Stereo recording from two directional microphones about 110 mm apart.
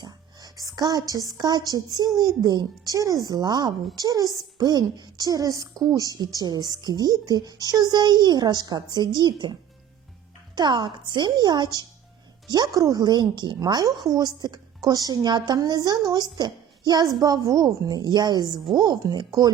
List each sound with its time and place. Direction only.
0.0 s a woman's voice: 35° right (ahead or behind)